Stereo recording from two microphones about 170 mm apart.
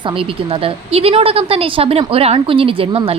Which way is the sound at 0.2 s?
30° right (ahead or behind).